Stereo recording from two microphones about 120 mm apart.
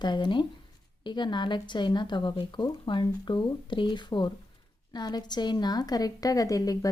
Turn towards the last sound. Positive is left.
turn(degrees=30)  # may be behind; listen again after turning